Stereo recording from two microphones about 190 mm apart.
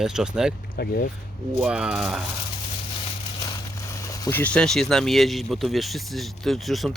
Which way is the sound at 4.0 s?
20° left (ahead or behind).